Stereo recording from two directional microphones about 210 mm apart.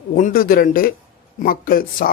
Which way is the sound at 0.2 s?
40° left (ahead or behind).